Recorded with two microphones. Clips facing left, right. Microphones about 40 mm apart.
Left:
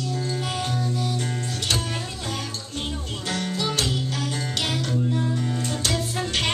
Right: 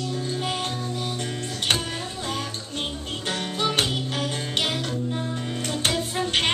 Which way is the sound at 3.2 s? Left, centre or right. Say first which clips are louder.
Right 1 dB; right.